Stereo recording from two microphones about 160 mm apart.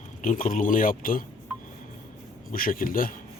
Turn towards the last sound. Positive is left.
turn(degrees=60)  # may be behind; listen again after turning